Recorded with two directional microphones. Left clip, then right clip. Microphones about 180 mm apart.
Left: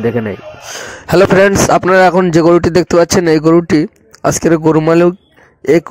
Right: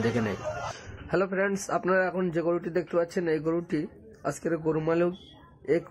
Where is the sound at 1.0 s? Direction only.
55° left (ahead or behind).